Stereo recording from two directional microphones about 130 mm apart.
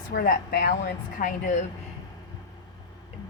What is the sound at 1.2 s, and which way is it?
Speech, 90° left.